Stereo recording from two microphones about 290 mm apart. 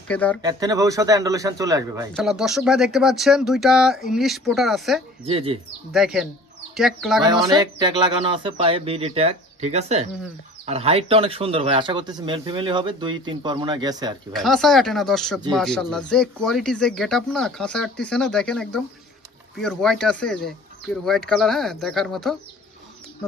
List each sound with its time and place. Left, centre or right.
0.1 s speech: centre
0.4 s speech: centre
2.1 s speech: centre
5.2 s speech: centre
5.9 s speech: centre
7.2 s speech: centre
14.3 s speech: centre